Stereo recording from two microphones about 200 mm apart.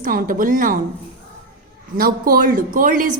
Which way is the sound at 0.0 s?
45° right (ahead or behind).